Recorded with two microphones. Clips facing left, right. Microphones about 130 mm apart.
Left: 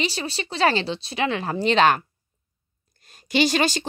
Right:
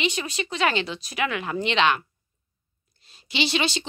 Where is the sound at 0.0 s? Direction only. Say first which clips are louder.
Even; 35° left (ahead or behind).